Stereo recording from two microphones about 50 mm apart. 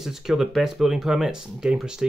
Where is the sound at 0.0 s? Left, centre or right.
Centre.